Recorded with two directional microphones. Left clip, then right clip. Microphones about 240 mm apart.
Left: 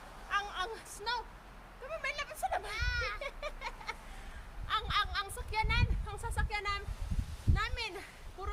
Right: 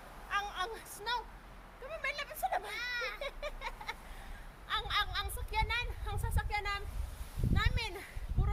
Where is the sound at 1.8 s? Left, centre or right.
Centre.